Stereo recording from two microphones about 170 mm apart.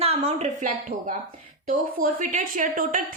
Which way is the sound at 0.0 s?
40° right (ahead or behind).